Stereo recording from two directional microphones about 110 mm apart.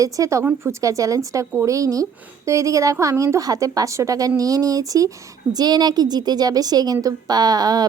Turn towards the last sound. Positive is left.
turn(degrees=-35)  # may be behind; listen again after turning